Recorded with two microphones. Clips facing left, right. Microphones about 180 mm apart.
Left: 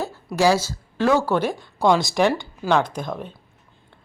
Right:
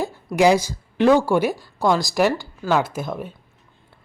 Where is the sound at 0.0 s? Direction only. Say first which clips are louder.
Right 2 dB; 15° right (ahead or behind).